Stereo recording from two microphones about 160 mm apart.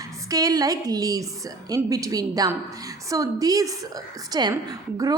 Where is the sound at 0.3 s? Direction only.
20° right (ahead or behind).